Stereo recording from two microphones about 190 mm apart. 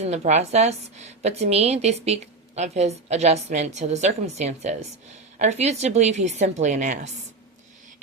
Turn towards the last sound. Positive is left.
turn(degrees=-40)  # may be behind; listen again after turning